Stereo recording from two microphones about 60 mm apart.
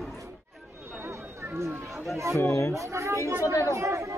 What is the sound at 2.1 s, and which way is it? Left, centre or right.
Speech, right.